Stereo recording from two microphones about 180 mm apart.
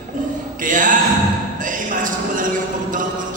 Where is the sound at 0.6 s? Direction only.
45° right (ahead or behind).